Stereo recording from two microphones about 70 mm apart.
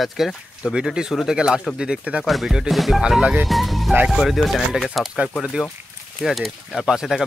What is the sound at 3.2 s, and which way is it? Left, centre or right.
Speech, centre.